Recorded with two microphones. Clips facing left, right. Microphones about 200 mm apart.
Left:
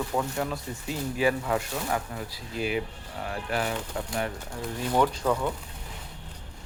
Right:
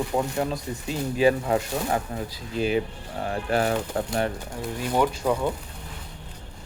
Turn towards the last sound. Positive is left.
turn(degrees=-10)  # may be behind; listen again after turning